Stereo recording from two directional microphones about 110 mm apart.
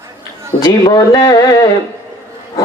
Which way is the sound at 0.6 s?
35° left (ahead or behind).